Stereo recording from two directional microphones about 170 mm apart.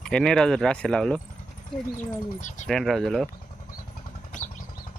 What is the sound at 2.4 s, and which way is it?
Speech, 45° left (ahead or behind).